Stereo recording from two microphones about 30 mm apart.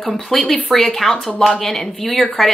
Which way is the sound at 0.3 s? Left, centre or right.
Centre.